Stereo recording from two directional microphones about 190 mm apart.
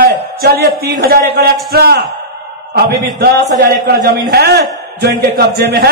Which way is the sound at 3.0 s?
55° right (ahead or behind).